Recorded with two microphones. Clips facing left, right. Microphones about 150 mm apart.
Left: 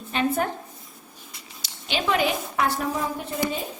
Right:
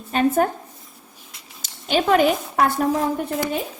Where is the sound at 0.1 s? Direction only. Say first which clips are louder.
Right 6 dB; 45° right (ahead or behind).